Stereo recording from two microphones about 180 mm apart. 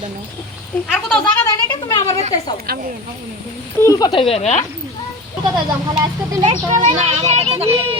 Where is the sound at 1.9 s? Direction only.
25° left (ahead or behind).